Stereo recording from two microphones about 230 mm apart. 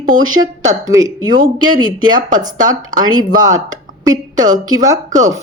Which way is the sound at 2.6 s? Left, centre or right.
Centre.